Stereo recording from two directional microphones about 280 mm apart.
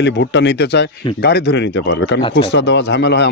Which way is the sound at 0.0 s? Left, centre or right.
Left.